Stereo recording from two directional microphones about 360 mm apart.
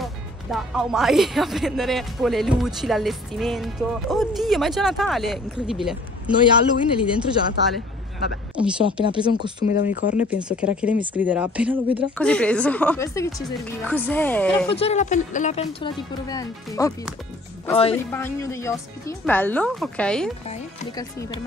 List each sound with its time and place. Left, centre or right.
0.0 s speech: centre
8.8 s speech: centre
9.7 s speech: left
10.1 s speech: centre
14.8 s speech: centre
20.4 s speech: centre